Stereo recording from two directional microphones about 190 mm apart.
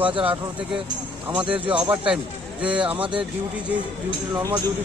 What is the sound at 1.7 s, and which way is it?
Speech, 10° right (ahead or behind).